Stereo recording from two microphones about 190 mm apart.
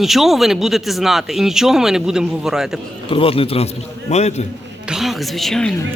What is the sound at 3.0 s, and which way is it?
A man's voice, 30° left (ahead or behind).